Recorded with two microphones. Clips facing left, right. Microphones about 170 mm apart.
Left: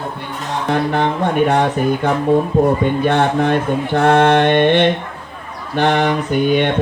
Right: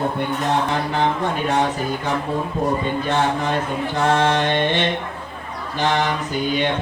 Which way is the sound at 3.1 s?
60° left (ahead or behind).